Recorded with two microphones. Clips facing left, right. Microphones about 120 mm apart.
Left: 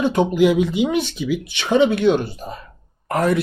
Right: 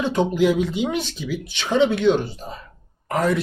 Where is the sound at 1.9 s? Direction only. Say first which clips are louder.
Left 1 dB; 55° left (ahead or behind).